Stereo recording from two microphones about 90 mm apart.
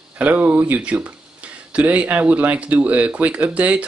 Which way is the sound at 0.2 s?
20° right (ahead or behind).